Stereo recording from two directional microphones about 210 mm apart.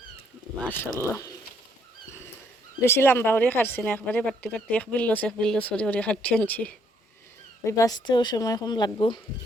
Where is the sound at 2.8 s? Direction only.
10° left (ahead or behind).